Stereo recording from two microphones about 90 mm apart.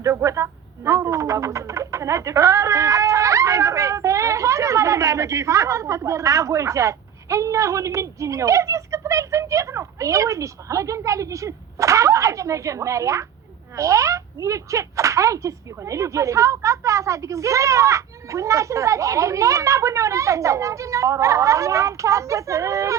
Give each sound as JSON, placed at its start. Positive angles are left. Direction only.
{"t": 0.0, "sound": "bird", "side_deg": -35}
{"t": 13.7, "sound": "speech", "side_deg": -35}